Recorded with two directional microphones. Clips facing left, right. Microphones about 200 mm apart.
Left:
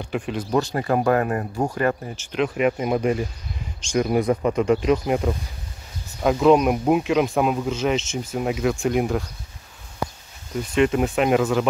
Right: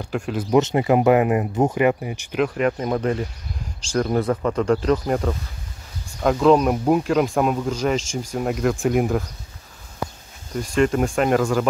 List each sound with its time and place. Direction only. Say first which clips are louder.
0.0 s speech: right 1 dB; centre (ahead or behind)
0.5 s speech: right 5 dB; 20° right (ahead or behind)
2.4 s speech: even; 5° left (ahead or behind)
10.7 s speech: even; 5° left (ahead or behind)